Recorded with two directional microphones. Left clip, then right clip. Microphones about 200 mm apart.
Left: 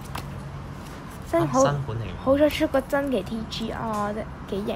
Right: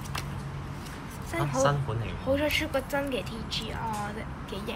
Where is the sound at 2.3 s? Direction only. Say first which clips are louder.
Left 7 dB; 55° left (ahead or behind).